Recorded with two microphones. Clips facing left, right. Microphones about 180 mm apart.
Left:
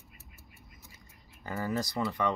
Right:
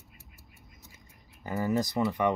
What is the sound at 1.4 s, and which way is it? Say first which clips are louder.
Speech: right 4 dB; 20° right (ahead or behind).